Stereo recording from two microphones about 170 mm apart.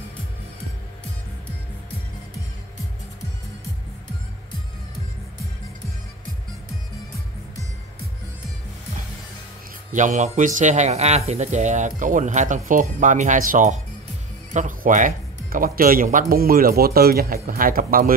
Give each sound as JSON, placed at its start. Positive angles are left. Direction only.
{"t": 9.9, "sound": "a man's voice", "side_deg": -45}